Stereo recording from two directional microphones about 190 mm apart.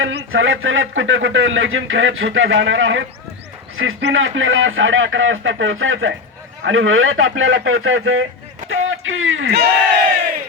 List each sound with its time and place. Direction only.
0.0 s a man's voice: 90° right; by 9.7 s 75° right (ahead or behind)